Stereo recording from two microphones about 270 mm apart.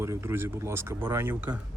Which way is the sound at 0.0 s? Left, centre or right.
Centre.